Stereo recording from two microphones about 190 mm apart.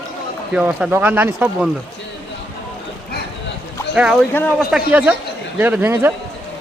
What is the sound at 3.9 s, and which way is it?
Speech, 5° right (ahead or behind).